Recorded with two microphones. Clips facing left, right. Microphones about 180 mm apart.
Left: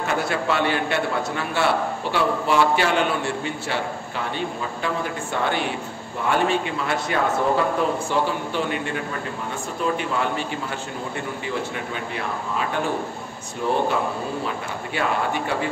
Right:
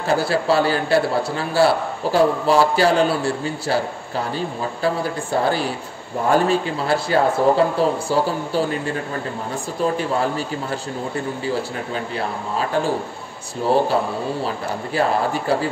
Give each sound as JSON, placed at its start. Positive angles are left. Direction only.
{"t": 0.0, "sound": "a man's voice", "side_deg": -35}
{"t": 15.0, "sound": "a man's voice", "side_deg": -35}